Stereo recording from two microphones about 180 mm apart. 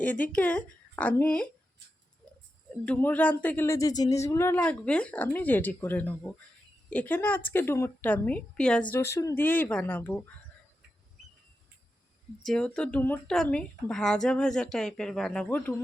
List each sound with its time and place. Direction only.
0.0 s speech: 10° left (ahead or behind)
2.6 s speech: 5° left (ahead or behind)
12.5 s speech: 5° left (ahead or behind)